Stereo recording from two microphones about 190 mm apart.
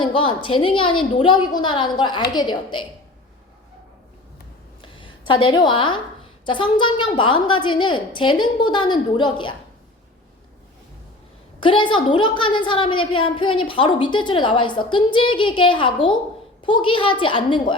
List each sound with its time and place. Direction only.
0.0 s a woman's voice: 25° left (ahead or behind)
4.8 s a sound: 25° left (ahead or behind)
6.4 s a woman's voice: 25° left (ahead or behind)
11.6 s a woman's voice: 25° left (ahead or behind)